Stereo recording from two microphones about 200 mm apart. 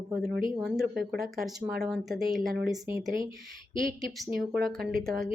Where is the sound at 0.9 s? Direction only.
50° right (ahead or behind).